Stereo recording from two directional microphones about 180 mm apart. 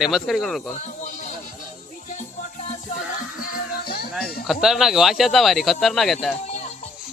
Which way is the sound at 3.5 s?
60° left (ahead or behind).